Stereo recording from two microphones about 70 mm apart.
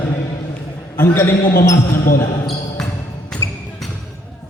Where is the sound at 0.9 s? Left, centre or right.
Left.